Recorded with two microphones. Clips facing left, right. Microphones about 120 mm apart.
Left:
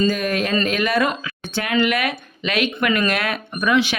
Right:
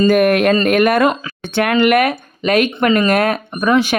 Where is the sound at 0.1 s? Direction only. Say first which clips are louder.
Right 9 dB; 60° right (ahead or behind).